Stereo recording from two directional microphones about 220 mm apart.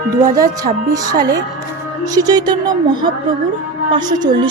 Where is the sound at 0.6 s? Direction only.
15° right (ahead or behind).